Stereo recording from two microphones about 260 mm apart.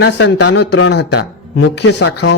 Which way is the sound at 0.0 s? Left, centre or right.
Left.